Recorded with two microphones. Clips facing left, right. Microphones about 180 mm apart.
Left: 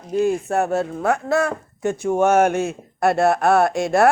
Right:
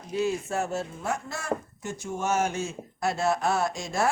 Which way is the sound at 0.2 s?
55° left (ahead or behind).